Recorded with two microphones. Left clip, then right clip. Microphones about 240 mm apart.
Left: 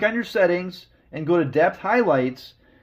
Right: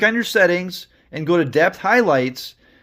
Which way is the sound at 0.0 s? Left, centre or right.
Right.